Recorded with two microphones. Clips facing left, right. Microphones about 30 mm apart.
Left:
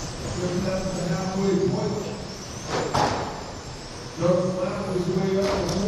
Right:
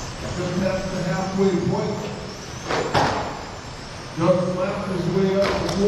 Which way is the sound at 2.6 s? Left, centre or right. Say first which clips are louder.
Right 3 dB; right.